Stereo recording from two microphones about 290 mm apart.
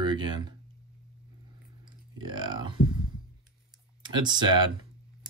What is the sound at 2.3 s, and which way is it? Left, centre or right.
Speech, centre.